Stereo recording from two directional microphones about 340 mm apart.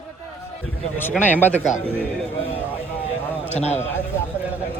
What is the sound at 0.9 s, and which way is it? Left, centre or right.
Speech, centre.